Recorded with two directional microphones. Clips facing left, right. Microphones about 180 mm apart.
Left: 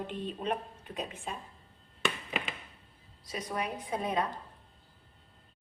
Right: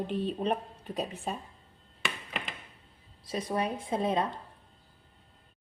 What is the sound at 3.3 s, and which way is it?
Speech, 30° right (ahead or behind).